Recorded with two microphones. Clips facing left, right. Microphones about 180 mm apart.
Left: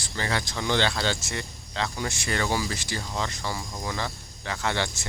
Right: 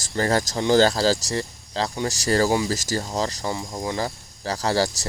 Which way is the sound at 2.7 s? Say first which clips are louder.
Right 7 dB; 40° right (ahead or behind).